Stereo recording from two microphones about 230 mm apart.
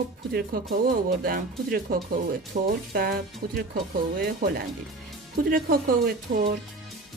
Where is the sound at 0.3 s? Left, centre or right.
Right.